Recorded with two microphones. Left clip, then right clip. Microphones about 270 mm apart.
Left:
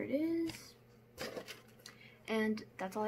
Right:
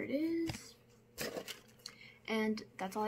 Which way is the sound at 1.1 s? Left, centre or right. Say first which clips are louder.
Right 2 dB; right.